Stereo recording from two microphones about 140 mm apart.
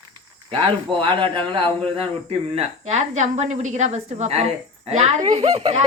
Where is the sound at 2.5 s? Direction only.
50° right (ahead or behind).